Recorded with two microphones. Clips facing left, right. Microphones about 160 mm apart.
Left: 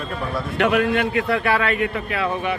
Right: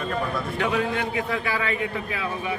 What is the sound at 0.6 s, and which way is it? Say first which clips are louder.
A man's voice: left 7 dB; 70° left (ahead or behind).